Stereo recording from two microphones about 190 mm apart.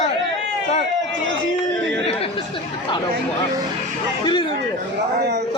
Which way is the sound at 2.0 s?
30° left (ahead or behind).